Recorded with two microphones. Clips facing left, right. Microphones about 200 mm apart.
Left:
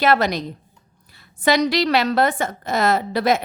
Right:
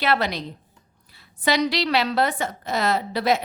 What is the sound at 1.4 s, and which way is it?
A woman's voice, 50° left (ahead or behind).